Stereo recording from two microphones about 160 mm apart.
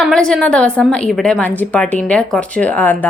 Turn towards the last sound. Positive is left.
turn(degrees=10)  # may be behind; listen again after turning